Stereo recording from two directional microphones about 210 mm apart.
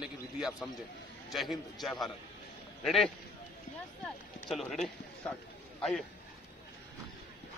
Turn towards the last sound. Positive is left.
turn(degrees=0)  # may be behind; listen again after turning